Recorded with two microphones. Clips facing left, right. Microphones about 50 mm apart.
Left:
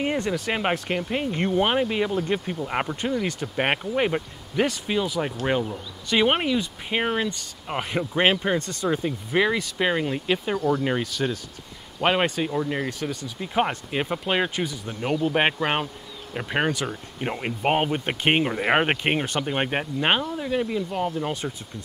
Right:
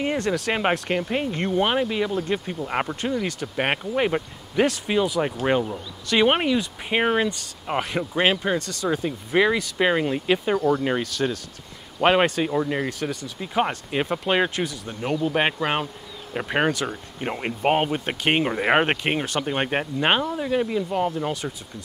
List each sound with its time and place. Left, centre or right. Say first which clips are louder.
0.3 s speech: right 2 dB; centre
7.8 s speech: left 1 dB; centre
8.5 s speech: even; left
8.8 s speech: even; centre
12.0 s speech: right 3 dB; centre
16.3 s speech: right 2 dB; centre
19.0 s speech: even; centre
19.4 s speech: right 1 dB; centre